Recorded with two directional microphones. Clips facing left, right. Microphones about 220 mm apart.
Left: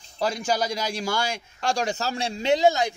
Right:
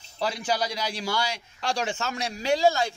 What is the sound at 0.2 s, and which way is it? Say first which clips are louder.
A man's voice: left 2 dB; 45° left (ahead or behind).